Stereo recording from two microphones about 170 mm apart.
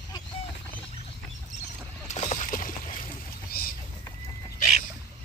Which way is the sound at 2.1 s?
40° left (ahead or behind).